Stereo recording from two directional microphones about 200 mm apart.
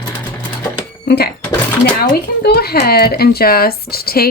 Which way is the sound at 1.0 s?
55° left (ahead or behind).